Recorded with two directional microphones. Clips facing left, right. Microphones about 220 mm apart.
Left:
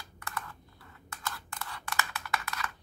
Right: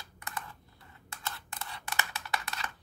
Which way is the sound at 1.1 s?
25° right (ahead or behind).